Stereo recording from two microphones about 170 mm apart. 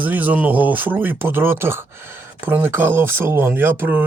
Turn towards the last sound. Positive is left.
turn(degrees=-10)  # may be behind; listen again after turning